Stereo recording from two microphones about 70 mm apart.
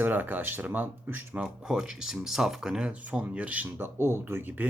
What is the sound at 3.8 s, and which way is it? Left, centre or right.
Speech, right.